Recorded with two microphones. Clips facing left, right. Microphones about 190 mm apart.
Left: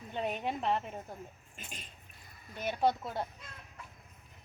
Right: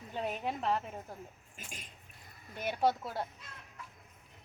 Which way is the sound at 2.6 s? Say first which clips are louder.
Even; 10° right (ahead or behind).